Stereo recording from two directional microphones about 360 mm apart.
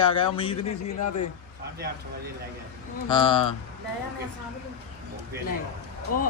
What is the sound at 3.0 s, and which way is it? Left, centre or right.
Speech, centre.